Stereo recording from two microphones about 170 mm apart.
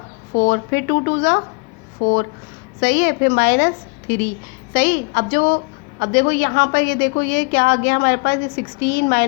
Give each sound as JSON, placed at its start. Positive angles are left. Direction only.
{"t": 0.3, "sound": "a woman's voice", "side_deg": 70}